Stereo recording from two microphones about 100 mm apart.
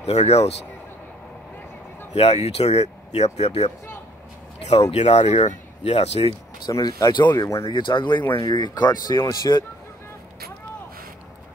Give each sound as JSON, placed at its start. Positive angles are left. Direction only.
{"t": 0.0, "sound": "speech", "side_deg": 90}
{"t": 2.1, "sound": "speech", "side_deg": 90}
{"t": 4.9, "sound": "speech", "side_deg": 90}
{"t": 6.7, "sound": "speech", "side_deg": 35}
{"t": 7.3, "sound": "speech", "side_deg": 30}
{"t": 7.6, "sound": "speech", "side_deg": 55}